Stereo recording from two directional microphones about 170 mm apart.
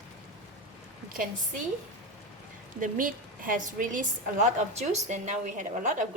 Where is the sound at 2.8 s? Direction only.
50° right (ahead or behind).